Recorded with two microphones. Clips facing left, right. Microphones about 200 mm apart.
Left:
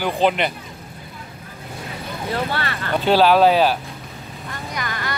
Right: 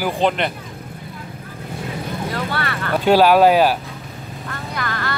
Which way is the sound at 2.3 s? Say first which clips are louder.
Left 3 dB; 25° left (ahead or behind).